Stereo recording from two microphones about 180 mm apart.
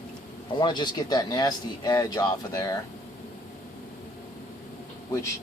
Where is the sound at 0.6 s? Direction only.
25° left (ahead or behind).